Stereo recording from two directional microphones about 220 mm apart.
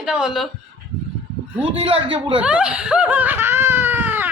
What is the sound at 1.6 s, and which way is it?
Speech, 25° right (ahead or behind).